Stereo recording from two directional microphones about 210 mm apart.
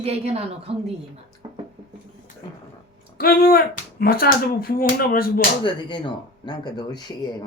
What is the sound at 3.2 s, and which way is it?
Speech, 45° left (ahead or behind).